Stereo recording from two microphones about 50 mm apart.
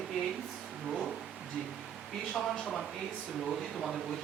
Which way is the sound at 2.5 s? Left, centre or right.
Centre.